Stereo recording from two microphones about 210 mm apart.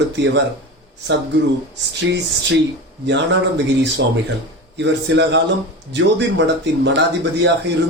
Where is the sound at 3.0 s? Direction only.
55° right (ahead or behind).